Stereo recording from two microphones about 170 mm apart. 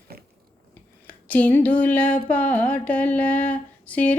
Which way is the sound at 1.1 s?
10° left (ahead or behind).